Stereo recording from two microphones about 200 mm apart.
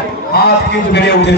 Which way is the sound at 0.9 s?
60° left (ahead or behind).